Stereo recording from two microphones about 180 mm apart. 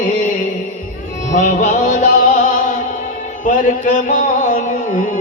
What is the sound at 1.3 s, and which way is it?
Music, 45° left (ahead or behind).